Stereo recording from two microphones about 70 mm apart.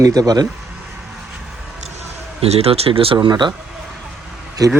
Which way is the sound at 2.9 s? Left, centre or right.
Right.